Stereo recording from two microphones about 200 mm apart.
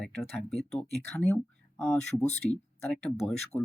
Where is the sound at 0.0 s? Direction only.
Centre (ahead or behind).